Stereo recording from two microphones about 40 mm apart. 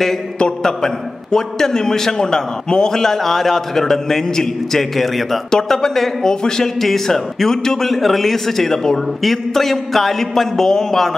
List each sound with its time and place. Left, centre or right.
0.7 s a man's voice: centre